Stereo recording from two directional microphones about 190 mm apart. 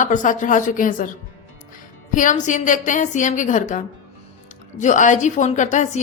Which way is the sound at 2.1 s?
40° left (ahead or behind).